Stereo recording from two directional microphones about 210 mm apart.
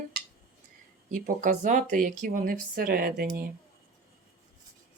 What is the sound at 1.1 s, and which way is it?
A woman's voice, 40° right (ahead or behind).